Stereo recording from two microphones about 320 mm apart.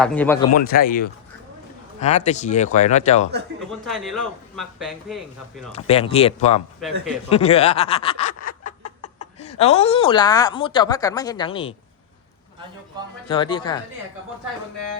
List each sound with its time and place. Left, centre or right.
0.0 s speech: centre
0.5 s speech: left
3.8 s speech: centre
5.7 s speech: centre
6.7 s speech: centre
7.3 s speech: centre
13.2 s speech: centre